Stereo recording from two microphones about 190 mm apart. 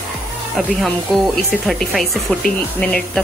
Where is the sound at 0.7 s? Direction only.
Centre (ahead or behind).